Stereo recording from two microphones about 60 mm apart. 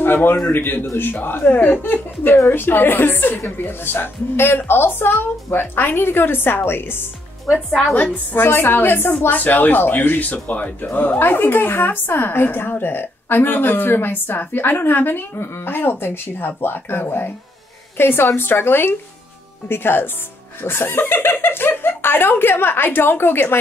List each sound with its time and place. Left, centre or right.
0.0 s speech: left
7.9 s a woman's voice: left
8.4 s speech: left